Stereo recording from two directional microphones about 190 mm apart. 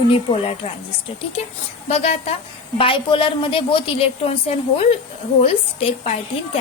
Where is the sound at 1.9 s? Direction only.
35° left (ahead or behind).